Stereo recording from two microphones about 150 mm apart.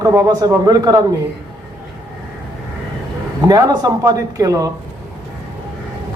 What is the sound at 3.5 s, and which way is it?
A man's voice, 25° right (ahead or behind).